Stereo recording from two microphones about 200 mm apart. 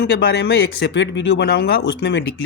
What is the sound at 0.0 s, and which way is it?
Speech, 55° left (ahead or behind).